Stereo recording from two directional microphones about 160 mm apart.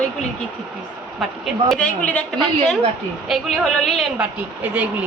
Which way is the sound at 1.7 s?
5° left (ahead or behind).